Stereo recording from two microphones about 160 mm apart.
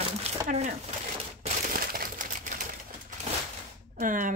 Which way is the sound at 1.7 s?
65° right (ahead or behind).